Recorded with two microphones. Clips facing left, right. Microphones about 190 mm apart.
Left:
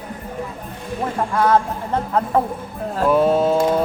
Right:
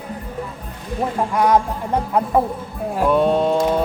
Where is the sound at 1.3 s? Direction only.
15° right (ahead or behind).